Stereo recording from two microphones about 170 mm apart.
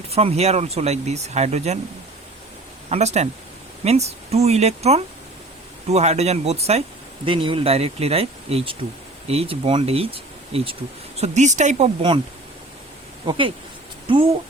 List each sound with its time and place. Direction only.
0.1 s speech: 35° right (ahead or behind)
2.9 s speech: 40° right (ahead or behind)
11.2 s speech: 45° right (ahead or behind)
13.2 s speech: 30° right (ahead or behind)